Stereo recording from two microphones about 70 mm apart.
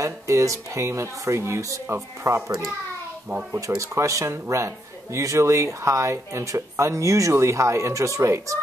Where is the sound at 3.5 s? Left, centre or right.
Right.